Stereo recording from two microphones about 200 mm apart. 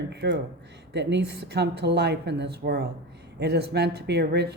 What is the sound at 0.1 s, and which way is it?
Speech, 55° right (ahead or behind).